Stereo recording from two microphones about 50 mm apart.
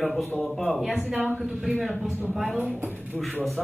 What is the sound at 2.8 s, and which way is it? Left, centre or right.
Speech, right.